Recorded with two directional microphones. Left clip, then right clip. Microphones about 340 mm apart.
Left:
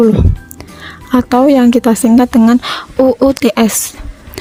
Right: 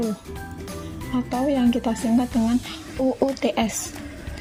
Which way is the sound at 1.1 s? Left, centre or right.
Left.